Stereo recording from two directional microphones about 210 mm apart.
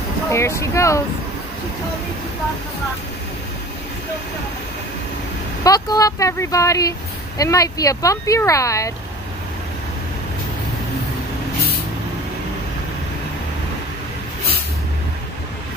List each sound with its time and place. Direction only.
0.3 s speech: 15° left (ahead or behind)
5.6 s speech: 15° left (ahead or behind)